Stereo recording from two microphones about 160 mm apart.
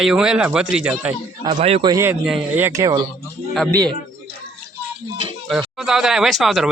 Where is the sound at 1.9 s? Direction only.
20° right (ahead or behind).